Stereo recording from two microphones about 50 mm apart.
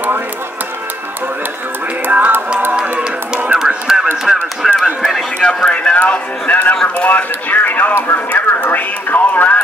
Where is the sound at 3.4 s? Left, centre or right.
Centre.